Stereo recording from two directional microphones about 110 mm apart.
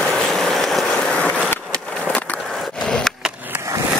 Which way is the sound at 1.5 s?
10° left (ahead or behind).